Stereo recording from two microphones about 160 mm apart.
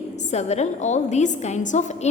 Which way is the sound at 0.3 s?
45° left (ahead or behind).